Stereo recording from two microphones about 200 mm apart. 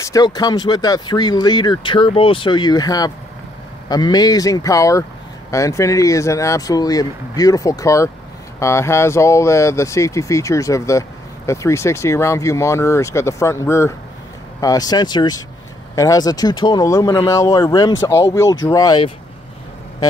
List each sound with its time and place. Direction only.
0.0 s speech: 20° left (ahead or behind)